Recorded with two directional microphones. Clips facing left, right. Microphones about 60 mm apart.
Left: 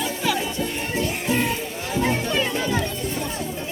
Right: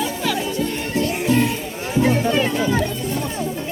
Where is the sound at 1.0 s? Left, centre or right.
Centre.